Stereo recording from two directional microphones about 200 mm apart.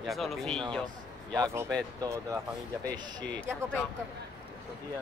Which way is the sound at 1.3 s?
20° right (ahead or behind).